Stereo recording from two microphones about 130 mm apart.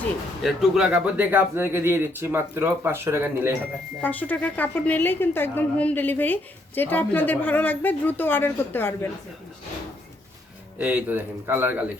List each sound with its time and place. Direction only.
0.4 s speech: 5° right (ahead or behind)
4.0 s a woman's voice: 15° left (ahead or behind)
10.8 s speech: 10° right (ahead or behind)